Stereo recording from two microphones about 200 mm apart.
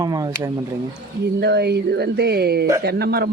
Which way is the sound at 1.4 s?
55° right (ahead or behind).